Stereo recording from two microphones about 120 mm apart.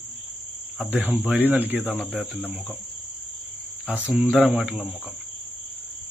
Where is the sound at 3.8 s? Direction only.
10° right (ahead or behind).